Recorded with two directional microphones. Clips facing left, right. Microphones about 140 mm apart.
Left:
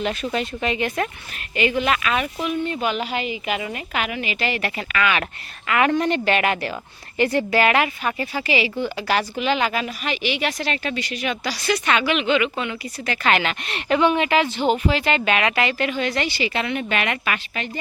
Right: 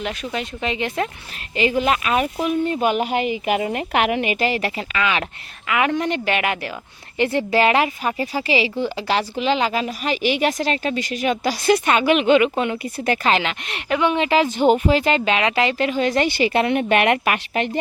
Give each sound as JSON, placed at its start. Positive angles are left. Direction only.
{"t": 0.0, "sound": "a woman's voice", "side_deg": -15}
{"t": 1.8, "sound": "a woman's voice", "side_deg": -35}
{"t": 2.8, "sound": "a woman's voice", "side_deg": -50}
{"t": 4.4, "sound": "a woman's voice", "side_deg": -35}
{"t": 4.8, "sound": "speech", "side_deg": -25}
{"t": 5.6, "sound": "a woman's voice", "side_deg": -10}
{"t": 7.3, "sound": "a woman's voice", "side_deg": -30}
{"t": 13.2, "sound": "speech", "side_deg": -25}
{"t": 13.5, "sound": "a woman's voice", "side_deg": -15}
{"t": 14.1, "sound": "speech", "side_deg": -30}
{"t": 14.5, "sound": "a woman's voice", "side_deg": -45}
{"t": 15.2, "sound": "a woman's voice", "side_deg": -25}